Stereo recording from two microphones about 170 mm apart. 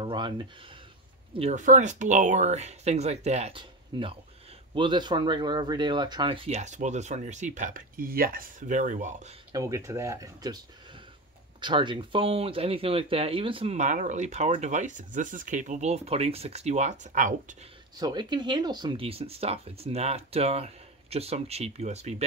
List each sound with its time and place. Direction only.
0.0 s speech: 30° right (ahead or behind)
1.5 s speech: 45° right (ahead or behind)
9.5 s speech: 20° right (ahead or behind)
11.6 s speech: 30° right (ahead or behind)
13.7 s speech: 45° right (ahead or behind)
17.9 s speech: 25° right (ahead or behind); by 22.1 s 40° right (ahead or behind)